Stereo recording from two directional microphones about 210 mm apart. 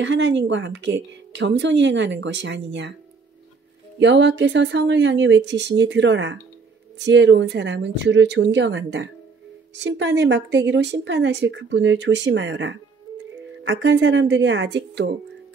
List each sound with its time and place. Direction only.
0.0 s a woman's voice: 60° right (ahead or behind)
4.0 s a woman's voice: 55° right (ahead or behind)